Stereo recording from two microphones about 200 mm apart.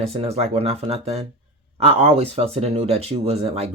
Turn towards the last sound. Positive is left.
turn(degrees=-30)  # may be behind; listen again after turning